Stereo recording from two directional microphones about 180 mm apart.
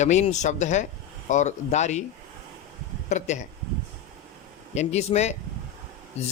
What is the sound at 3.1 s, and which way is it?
Speech, 40° left (ahead or behind).